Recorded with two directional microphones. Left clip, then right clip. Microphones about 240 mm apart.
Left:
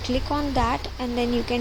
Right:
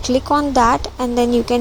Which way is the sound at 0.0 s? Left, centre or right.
Right.